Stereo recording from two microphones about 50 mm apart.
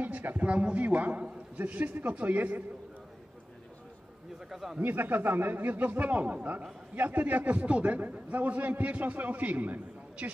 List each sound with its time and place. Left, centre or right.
0.0 s a sound: right
0.5 s a man's voice: right
4.5 s a man's voice: centre
4.7 s a man's voice: right